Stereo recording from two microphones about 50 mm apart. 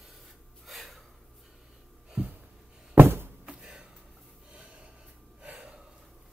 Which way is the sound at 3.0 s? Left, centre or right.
Right.